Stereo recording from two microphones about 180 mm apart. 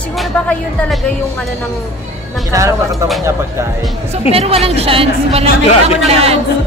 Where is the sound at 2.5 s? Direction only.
15° right (ahead or behind).